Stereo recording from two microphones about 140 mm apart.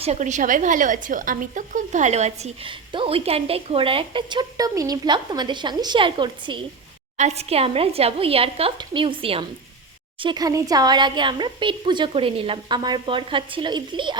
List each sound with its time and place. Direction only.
0.0 s a woman's voice: 55° right (ahead or behind)
2.6 s speech: 40° right (ahead or behind)
7.2 s a woman's voice: 50° right (ahead or behind); by 14.2 s 35° right (ahead or behind)